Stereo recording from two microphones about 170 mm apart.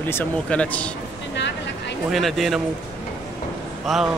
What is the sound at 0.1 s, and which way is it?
Speech, 10° left (ahead or behind).